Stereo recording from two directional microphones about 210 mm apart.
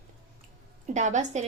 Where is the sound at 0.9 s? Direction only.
35° right (ahead or behind).